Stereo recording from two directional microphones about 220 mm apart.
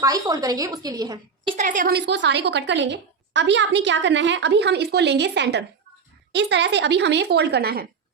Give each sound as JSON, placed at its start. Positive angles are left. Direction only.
{"t": 0.0, "sound": "a woman's voice", "side_deg": -15}
{"t": 1.5, "sound": "a woman's voice", "side_deg": -35}
{"t": 2.0, "sound": "a woman's voice", "side_deg": -50}